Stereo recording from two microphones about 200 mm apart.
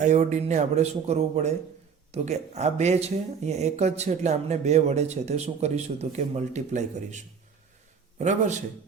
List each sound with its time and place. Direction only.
0.0 s speech: 35° right (ahead or behind)